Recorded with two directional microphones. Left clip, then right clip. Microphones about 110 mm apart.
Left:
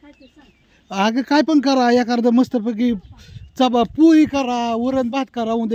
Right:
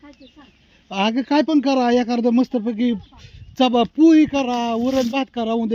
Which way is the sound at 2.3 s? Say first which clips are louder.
Left 2 dB; 30° left (ahead or behind).